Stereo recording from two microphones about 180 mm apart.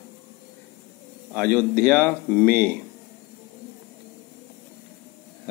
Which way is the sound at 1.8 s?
5° left (ahead or behind).